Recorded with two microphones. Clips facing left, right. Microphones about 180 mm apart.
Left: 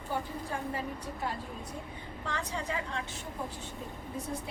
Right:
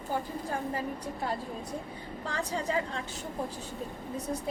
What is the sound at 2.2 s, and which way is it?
Speech, 35° right (ahead or behind).